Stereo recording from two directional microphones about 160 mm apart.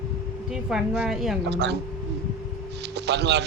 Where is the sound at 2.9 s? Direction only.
90° right.